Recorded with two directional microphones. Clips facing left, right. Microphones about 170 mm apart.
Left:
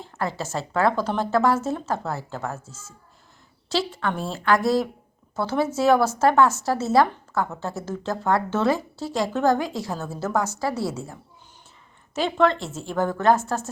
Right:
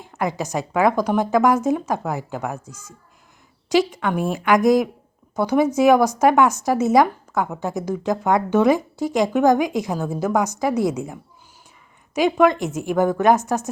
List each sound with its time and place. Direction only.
0.0 s speech: 15° right (ahead or behind)